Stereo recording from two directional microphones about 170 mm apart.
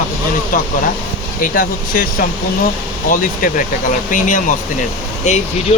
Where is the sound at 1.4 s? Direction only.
55° left (ahead or behind).